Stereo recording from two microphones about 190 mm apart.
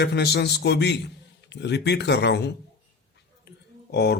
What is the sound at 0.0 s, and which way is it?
A man's voice, 60° left (ahead or behind).